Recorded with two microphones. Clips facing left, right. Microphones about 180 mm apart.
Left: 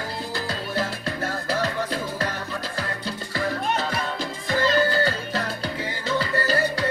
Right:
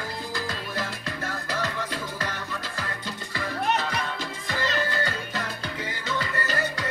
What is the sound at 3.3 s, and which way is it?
Music, 35° left (ahead or behind).